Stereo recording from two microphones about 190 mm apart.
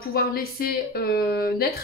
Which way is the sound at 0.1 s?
50° left (ahead or behind).